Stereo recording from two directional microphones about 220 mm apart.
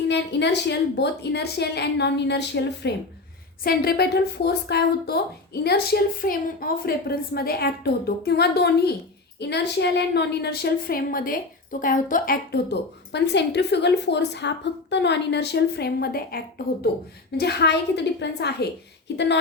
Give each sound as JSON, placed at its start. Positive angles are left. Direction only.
{"t": 0.1, "sound": "a woman's voice", "side_deg": 50}